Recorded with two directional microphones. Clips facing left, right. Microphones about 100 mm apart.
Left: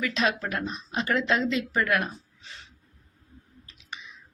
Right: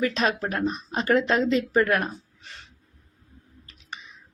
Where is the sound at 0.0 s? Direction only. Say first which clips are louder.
Right 3 dB; 40° right (ahead or behind).